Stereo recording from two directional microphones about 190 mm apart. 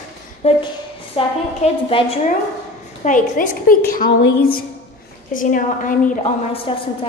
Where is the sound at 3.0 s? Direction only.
45° left (ahead or behind).